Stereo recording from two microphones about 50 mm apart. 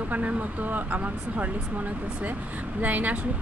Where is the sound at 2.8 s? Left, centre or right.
Right.